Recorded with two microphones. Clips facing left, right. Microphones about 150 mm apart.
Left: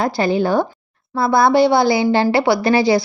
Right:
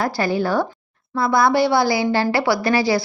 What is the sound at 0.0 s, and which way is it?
A woman's voice, 20° left (ahead or behind).